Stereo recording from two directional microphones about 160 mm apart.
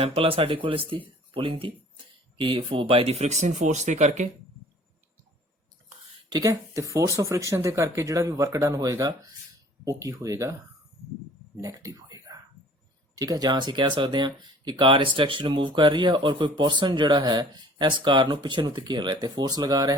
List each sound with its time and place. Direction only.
0.0 s speech: 35° right (ahead or behind)
6.3 s speech: 20° right (ahead or behind)
11.5 s a sound: 20° right (ahead or behind)
13.1 s speech: 25° right (ahead or behind)